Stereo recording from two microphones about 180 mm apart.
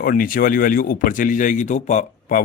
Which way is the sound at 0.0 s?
50° left (ahead or behind).